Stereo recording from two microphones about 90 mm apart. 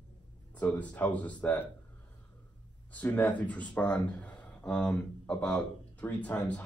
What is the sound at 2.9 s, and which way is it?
Speech, 20° left (ahead or behind).